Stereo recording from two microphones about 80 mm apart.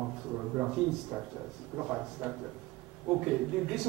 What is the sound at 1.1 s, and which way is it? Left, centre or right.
A man's voice, right.